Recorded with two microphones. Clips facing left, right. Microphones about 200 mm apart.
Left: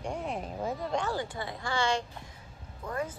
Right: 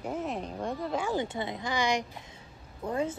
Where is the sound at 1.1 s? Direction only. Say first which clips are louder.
Right 4 dB; 20° right (ahead or behind).